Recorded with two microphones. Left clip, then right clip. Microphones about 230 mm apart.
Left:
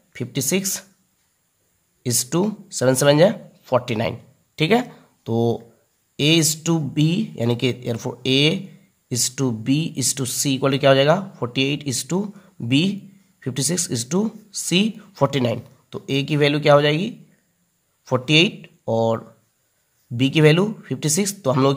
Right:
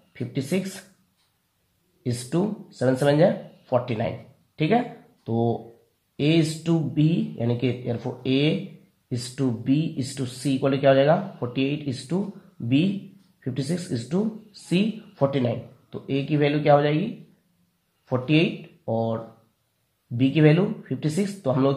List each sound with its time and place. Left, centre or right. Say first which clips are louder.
0.1 s speech: left 5 dB; left
2.0 s speech: left 5 dB; left